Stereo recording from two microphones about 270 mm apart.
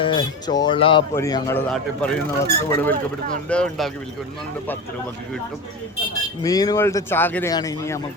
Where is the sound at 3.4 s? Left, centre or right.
Centre.